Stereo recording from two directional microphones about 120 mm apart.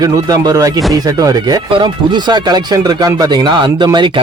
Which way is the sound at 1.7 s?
40° right (ahead or behind).